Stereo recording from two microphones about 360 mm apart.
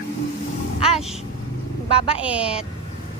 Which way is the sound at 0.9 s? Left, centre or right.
Centre.